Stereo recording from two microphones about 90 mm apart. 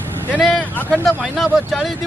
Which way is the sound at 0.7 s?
20° left (ahead or behind).